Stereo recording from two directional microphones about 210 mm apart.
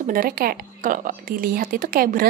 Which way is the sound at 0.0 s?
45° right (ahead or behind).